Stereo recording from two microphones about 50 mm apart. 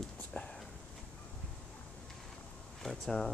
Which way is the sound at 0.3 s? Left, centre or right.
Centre.